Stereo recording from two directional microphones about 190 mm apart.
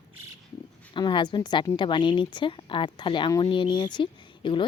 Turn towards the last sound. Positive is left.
turn(degrees=25)  # may be behind; listen again after turning